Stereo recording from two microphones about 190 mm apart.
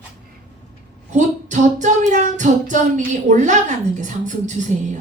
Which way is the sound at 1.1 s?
40° right (ahead or behind).